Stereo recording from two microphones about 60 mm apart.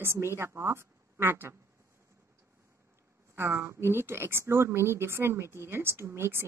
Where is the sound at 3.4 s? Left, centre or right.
Right.